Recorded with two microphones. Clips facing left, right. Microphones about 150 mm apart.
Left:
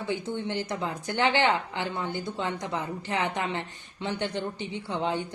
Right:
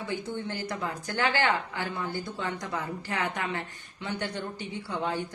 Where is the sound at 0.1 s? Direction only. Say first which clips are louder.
Left 4 dB; 20° left (ahead or behind).